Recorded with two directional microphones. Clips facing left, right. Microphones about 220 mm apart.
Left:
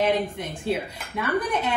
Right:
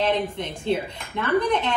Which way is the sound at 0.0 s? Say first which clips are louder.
Even; 10° left (ahead or behind).